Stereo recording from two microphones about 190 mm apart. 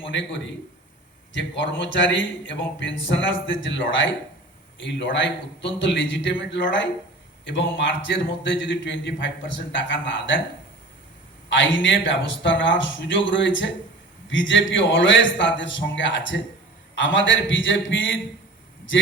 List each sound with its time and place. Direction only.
0.1 s a man's voice: 75° left (ahead or behind)
11.4 s a man's voice: 75° left (ahead or behind)